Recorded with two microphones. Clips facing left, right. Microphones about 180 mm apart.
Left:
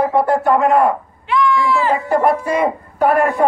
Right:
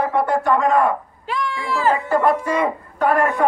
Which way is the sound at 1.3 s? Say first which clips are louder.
Left 8 dB; 40° right (ahead or behind).